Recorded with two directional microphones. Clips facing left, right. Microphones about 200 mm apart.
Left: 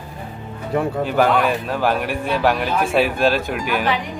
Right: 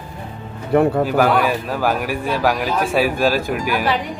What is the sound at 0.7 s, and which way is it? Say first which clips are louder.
Speech: right 6 dB; 60° right (ahead or behind).